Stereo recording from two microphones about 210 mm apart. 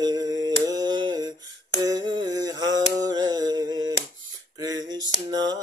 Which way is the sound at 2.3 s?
20° right (ahead or behind).